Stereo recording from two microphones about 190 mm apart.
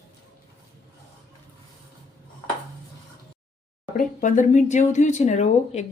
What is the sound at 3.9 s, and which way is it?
Speech, 45° left (ahead or behind).